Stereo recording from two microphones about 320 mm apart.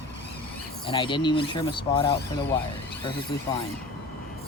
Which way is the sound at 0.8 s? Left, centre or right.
Centre.